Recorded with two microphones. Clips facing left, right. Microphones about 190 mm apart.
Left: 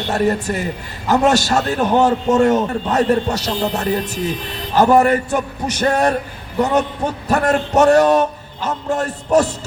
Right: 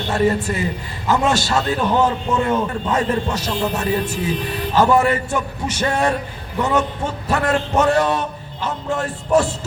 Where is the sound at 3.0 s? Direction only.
70° left (ahead or behind).